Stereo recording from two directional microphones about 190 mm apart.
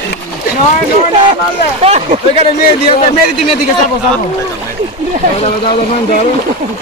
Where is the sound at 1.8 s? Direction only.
35° right (ahead or behind).